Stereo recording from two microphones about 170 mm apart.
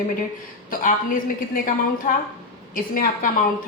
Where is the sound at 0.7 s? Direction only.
55° left (ahead or behind).